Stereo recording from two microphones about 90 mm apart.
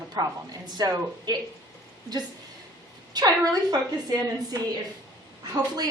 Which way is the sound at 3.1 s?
45° right (ahead or behind).